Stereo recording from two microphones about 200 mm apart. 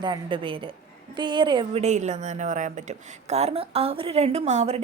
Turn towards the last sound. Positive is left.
turn(degrees=-35)  # may be behind; listen again after turning